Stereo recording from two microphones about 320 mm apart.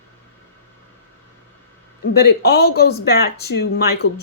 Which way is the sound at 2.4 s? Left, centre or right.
Left.